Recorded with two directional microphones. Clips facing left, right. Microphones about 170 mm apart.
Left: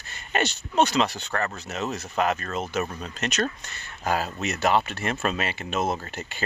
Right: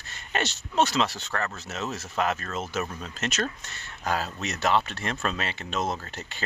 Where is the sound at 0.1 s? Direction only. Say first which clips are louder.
Left 3 dB; centre (ahead or behind).